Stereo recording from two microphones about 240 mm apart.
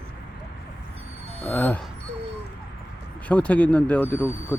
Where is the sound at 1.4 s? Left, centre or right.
Centre.